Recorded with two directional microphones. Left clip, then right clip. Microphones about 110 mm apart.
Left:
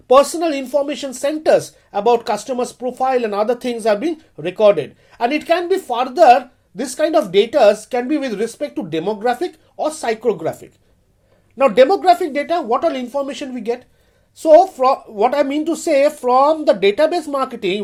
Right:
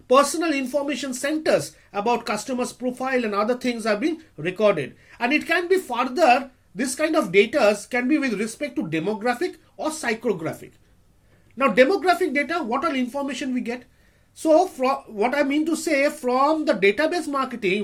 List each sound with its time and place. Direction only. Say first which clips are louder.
0.1 s speech: left 6 dB; 35° left (ahead or behind)